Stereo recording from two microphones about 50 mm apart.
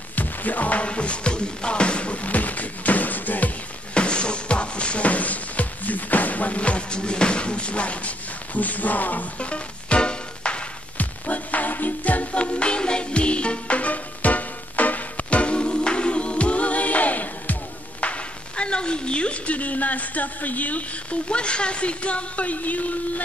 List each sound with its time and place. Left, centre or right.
0.1 s music: left
3.9 s music: left
11.0 s music: left
18.0 s a woman's voice: left